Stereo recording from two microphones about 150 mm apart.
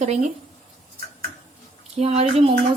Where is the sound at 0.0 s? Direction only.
50° right (ahead or behind).